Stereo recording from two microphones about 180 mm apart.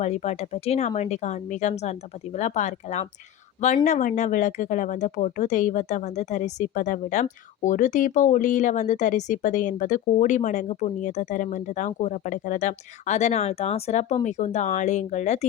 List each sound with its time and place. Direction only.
0.0 s speech: 40° left (ahead or behind)